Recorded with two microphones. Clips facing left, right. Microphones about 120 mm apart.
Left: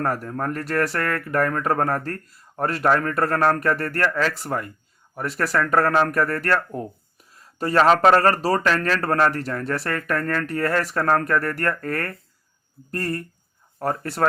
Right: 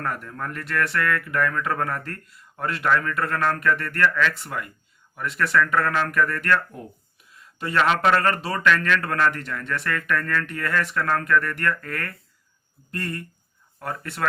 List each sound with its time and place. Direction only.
0.0 s speech: 40° left (ahead or behind)